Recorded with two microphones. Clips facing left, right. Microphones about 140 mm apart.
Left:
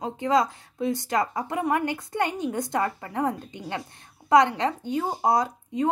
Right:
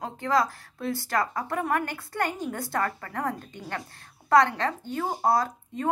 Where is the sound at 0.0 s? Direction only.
20° left (ahead or behind).